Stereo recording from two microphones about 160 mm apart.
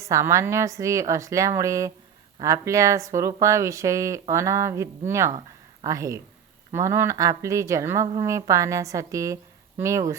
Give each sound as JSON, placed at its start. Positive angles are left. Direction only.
{"t": 0.0, "sound": "speech", "side_deg": -20}